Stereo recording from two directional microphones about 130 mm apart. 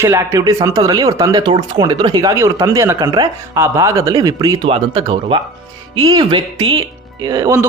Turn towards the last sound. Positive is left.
turn(degrees=-25)  # may be behind; listen again after turning